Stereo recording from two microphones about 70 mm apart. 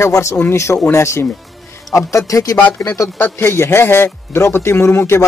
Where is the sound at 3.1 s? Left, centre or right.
Left.